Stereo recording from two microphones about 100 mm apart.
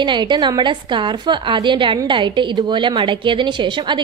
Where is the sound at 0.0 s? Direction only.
50° right (ahead or behind).